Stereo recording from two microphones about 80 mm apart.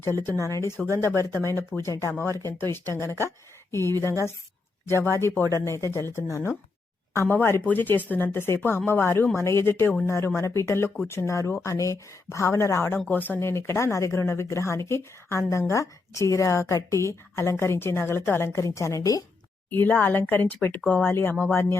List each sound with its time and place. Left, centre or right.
0.0 s a woman's voice: left
13.1 s speech: left
13.5 s a woman's voice: left
19.7 s speech: left